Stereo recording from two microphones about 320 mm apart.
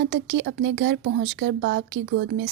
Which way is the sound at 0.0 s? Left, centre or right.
Right.